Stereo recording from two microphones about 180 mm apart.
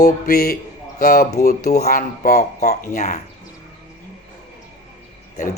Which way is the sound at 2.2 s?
45° left (ahead or behind).